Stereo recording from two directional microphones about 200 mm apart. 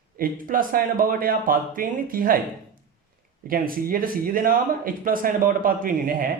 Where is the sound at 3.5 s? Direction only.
45° right (ahead or behind).